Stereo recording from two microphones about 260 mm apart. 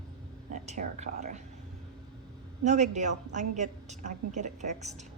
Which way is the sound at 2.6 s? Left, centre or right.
Right.